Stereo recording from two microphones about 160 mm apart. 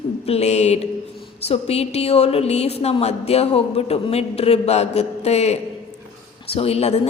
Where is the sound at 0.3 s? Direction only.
45° left (ahead or behind).